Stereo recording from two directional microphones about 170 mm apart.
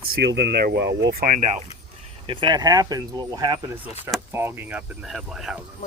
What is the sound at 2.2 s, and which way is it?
Speech, 30° right (ahead or behind).